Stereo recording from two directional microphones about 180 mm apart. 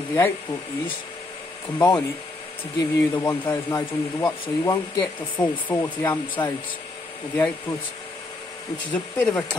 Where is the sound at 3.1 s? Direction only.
20° left (ahead or behind).